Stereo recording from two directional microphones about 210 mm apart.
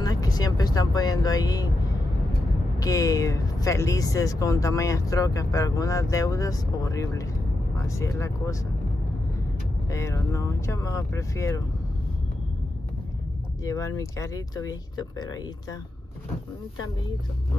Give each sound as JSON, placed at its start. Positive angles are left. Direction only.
{"t": 0.0, "sound": "vehicle", "side_deg": 20}
{"t": 2.8, "sound": "speech", "side_deg": 15}
{"t": 9.8, "sound": "speech", "side_deg": 15}
{"t": 13.7, "sound": "speech", "side_deg": 15}